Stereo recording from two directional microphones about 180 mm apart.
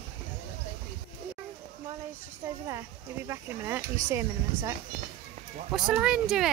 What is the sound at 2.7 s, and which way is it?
Speech, 15° right (ahead or behind).